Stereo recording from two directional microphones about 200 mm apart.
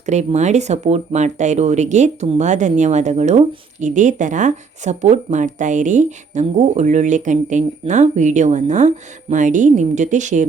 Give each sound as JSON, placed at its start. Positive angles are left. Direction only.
{"t": 0.0, "sound": "speech", "side_deg": -35}